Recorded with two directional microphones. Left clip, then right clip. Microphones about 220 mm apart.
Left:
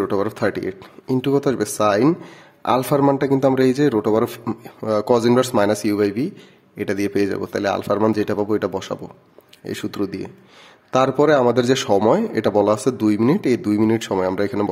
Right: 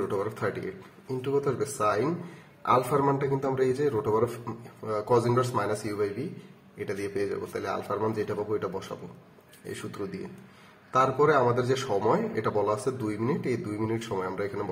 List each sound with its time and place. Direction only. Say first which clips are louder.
0.1 s a man's voice: left 9 dB; 50° left (ahead or behind)